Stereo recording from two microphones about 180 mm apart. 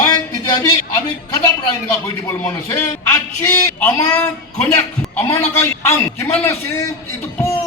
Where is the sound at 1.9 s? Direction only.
15° left (ahead or behind).